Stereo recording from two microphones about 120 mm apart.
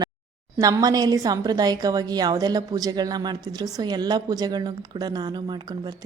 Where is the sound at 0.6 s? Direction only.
30° right (ahead or behind).